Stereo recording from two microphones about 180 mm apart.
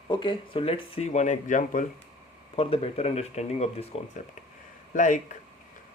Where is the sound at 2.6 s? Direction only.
35° left (ahead or behind).